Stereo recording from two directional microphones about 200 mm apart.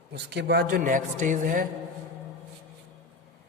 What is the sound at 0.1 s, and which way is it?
A woman's voice, 55° right (ahead or behind).